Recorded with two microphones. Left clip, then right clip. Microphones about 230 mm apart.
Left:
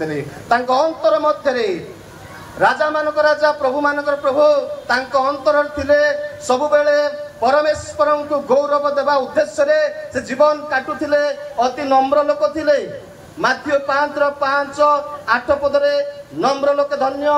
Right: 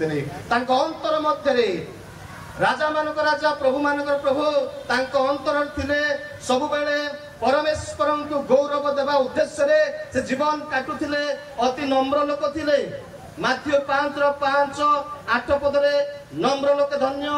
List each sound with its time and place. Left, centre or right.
0.0 s a man's voice: centre